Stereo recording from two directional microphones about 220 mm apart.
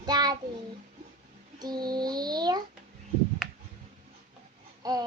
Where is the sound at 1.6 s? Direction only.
20° right (ahead or behind).